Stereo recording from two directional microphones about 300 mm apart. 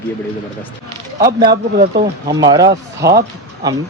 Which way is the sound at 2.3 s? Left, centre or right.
Centre.